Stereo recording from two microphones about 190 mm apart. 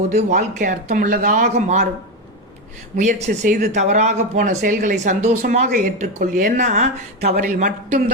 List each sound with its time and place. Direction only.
0.1 s speech: 40° right (ahead or behind)
3.0 s speech: 40° right (ahead or behind)
7.3 s speech: 50° right (ahead or behind)